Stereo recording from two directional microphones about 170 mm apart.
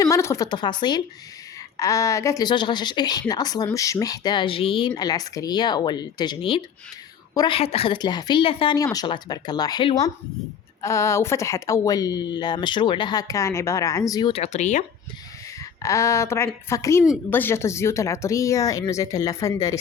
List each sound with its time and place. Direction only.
0.0 s a woman's voice: 15° left (ahead or behind); by 14.8 s 45° left (ahead or behind)
15.8 s a woman's voice: 15° left (ahead or behind)